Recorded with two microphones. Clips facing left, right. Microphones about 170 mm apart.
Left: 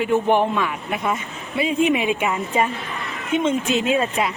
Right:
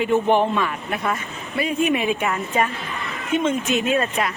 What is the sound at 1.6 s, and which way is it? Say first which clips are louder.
Speech: left 2 dB; 25° left (ahead or behind).